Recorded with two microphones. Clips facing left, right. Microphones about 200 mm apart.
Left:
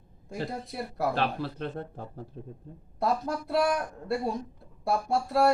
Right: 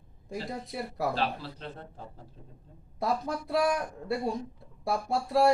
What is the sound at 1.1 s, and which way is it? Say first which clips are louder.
Speech: left 3 dB; 55° left (ahead or behind).